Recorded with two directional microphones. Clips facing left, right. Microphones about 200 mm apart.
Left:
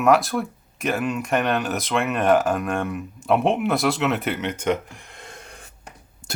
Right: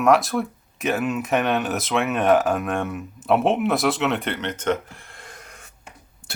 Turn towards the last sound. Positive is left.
turn(degrees=10)  # may be behind; listen again after turning